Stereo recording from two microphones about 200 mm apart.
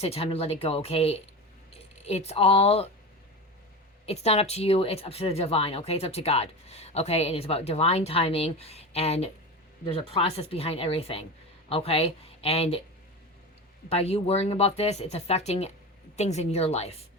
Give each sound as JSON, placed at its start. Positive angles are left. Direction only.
{"t": 0.0, "sound": "speech", "side_deg": 30}
{"t": 4.0, "sound": "speech", "side_deg": 30}
{"t": 13.9, "sound": "speech", "side_deg": 30}